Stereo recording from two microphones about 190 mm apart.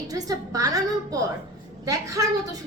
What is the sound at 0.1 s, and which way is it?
A woman's voice, 20° right (ahead or behind).